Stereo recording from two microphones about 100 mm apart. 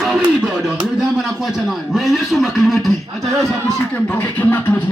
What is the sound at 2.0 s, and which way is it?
Speech, centre (ahead or behind).